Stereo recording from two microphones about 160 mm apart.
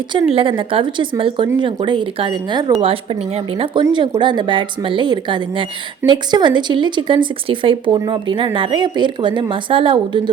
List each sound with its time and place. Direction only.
0.1 s speech: 30° right (ahead or behind)